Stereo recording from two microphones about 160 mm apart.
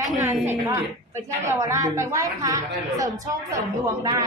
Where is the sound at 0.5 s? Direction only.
15° right (ahead or behind).